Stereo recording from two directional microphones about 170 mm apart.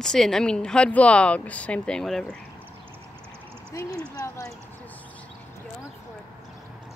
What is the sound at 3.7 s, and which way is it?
Speech, 20° left (ahead or behind).